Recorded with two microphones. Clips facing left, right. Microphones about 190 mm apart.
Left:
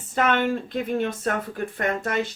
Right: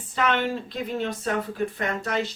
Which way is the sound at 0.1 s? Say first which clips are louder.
Left 3 dB; 50° left (ahead or behind).